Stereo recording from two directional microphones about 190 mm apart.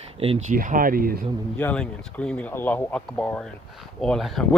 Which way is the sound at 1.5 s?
10° left (ahead or behind).